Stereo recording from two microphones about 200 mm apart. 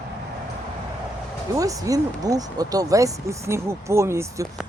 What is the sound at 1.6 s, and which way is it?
Speech, 15° right (ahead or behind).